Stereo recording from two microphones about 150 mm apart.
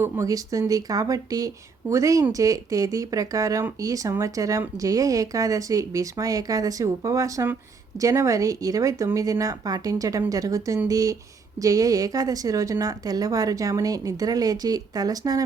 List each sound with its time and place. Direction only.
0.0 s speech: 20° right (ahead or behind)